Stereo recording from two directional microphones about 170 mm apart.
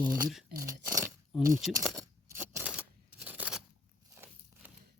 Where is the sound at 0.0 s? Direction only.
20° right (ahead or behind).